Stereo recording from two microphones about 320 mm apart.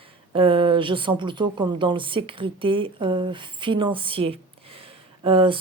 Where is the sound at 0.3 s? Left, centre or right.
Centre.